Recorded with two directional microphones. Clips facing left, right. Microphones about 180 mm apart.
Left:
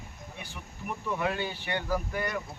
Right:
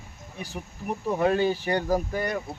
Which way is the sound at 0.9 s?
35° right (ahead or behind).